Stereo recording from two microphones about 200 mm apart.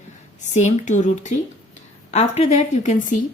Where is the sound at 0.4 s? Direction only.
35° left (ahead or behind).